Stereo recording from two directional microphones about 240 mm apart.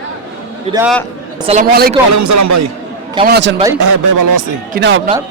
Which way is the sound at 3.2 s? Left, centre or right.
Right.